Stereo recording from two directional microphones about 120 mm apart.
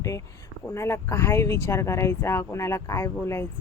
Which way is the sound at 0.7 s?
25° left (ahead or behind).